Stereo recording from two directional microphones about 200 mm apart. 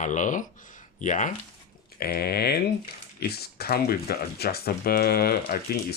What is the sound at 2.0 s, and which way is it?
Speech, 50° left (ahead or behind).